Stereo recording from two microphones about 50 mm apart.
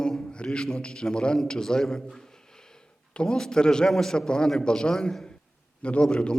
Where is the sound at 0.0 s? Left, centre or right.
Centre.